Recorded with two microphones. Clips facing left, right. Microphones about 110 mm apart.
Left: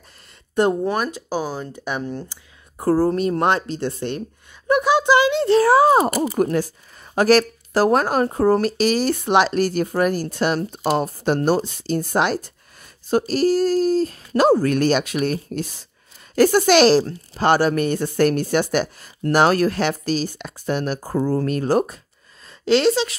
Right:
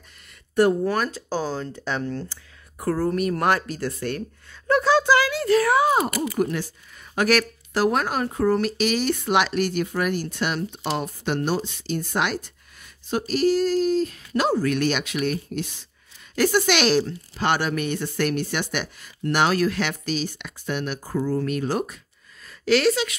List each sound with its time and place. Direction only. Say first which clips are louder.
0.6 s speech: left 1 dB; 20° left (ahead or behind)
2.8 s speech: left 5 dB; 30° left (ahead or behind)
6.3 s speech: left 5 dB; 45° left (ahead or behind)
22.5 s speech: left 3 dB; 25° left (ahead or behind)